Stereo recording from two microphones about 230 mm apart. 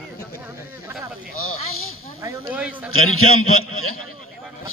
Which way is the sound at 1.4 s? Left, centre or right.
Left.